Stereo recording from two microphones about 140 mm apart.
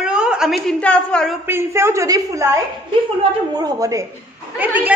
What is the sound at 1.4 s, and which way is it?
A woman's voice, 20° right (ahead or behind).